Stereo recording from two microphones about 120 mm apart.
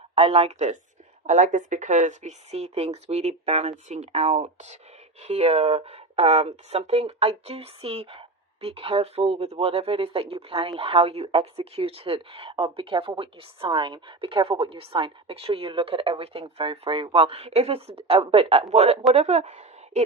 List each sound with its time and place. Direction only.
0.2 s speech: 55° right (ahead or behind)
1.3 s speech: 90° right; by 18.6 s 55° right (ahead or behind)
18.7 s a woman's voice: 70° right (ahead or behind)